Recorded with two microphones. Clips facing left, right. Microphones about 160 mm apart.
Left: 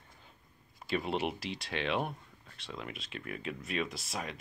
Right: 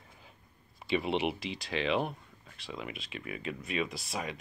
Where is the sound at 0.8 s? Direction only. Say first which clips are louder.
Right 3 dB; centre (ahead or behind).